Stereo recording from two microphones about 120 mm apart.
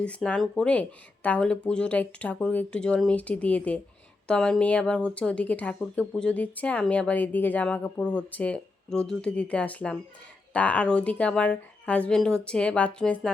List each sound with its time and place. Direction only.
0.0 s speech: 10° left (ahead or behind)